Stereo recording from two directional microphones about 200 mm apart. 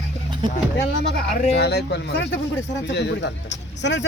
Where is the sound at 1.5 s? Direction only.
55° left (ahead or behind).